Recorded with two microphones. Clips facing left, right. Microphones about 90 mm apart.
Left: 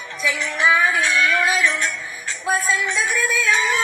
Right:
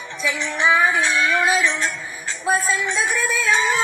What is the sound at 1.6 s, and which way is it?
Music, 30° right (ahead or behind).